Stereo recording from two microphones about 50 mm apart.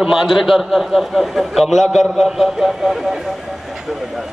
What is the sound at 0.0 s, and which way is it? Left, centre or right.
A man's voice, centre.